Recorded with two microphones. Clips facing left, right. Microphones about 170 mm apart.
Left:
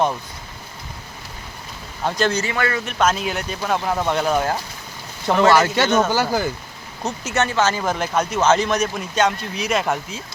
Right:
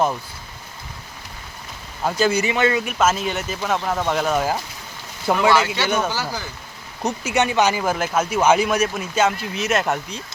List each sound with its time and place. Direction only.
2.0 s speech: 5° right (ahead or behind)
2.8 s speech: 5° right (ahead or behind)
5.5 s speech: 50° left (ahead or behind)
7.0 s speech: 15° right (ahead or behind); by 10.2 s centre (ahead or behind)